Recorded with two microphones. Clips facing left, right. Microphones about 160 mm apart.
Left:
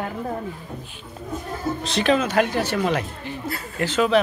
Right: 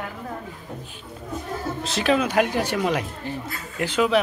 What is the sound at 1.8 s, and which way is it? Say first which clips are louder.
A man's voice: left 1 dB; 5° right (ahead or behind).